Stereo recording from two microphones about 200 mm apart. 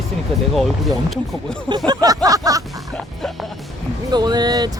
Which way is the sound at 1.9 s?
20° right (ahead or behind).